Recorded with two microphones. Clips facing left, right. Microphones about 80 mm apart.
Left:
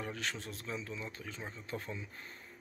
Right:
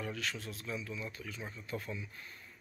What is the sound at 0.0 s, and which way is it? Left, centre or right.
Speech, left.